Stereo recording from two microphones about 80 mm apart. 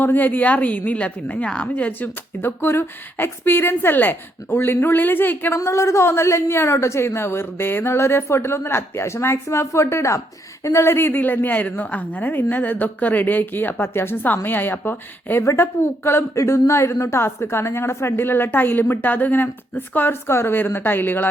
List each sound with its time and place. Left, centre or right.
0.0 s speech: left
5.5 s a woman's voice: left